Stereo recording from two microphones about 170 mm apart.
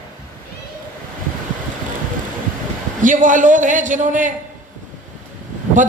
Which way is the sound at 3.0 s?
50° right (ahead or behind).